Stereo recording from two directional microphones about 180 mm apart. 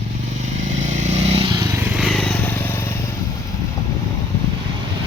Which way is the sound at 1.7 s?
10° right (ahead or behind).